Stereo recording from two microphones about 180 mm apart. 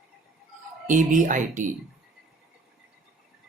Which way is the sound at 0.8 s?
45° right (ahead or behind).